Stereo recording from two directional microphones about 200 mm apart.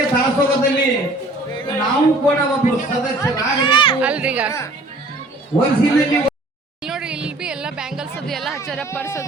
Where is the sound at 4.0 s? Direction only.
5° right (ahead or behind).